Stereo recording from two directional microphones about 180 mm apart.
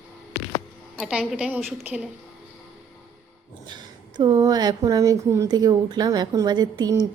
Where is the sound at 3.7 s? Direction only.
25° right (ahead or behind).